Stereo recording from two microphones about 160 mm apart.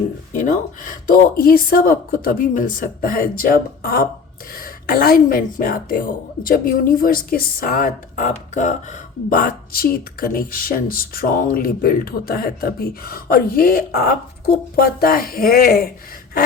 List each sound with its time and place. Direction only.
0.3 s a woman's voice: 55° left (ahead or behind); by 15.9 s 70° left (ahead or behind)